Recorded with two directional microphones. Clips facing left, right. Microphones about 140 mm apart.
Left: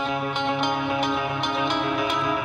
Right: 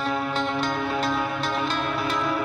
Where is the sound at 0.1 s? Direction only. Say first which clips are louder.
Even; 20° left (ahead or behind).